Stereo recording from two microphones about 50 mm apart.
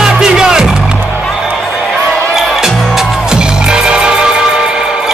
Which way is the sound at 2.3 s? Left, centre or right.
Centre.